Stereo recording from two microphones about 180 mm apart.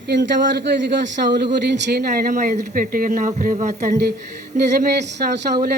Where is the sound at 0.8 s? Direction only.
70° right (ahead or behind).